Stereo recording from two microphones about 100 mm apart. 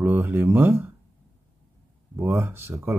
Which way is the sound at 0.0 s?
20° right (ahead or behind).